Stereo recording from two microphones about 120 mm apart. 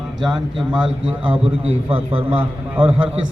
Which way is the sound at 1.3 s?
50° right (ahead or behind).